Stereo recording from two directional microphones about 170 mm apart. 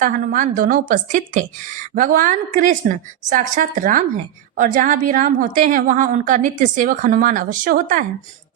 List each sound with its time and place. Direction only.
0.0 s a woman's voice: 50° right (ahead or behind)